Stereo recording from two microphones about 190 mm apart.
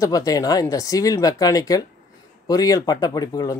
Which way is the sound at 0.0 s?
20° left (ahead or behind).